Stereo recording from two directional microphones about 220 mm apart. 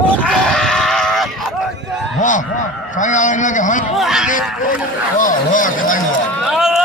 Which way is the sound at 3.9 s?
Centre (ahead or behind).